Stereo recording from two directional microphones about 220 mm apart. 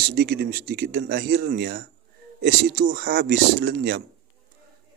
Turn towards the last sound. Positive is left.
turn(degrees=-45)  # may be behind; listen again after turning